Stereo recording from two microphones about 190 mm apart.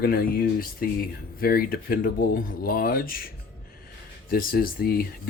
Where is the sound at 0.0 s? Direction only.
50° left (ahead or behind).